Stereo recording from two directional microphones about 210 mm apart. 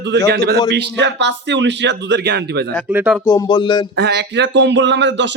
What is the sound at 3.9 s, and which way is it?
A man's voice, 50° right (ahead or behind).